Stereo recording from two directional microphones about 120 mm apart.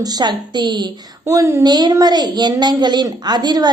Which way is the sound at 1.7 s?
35° right (ahead or behind).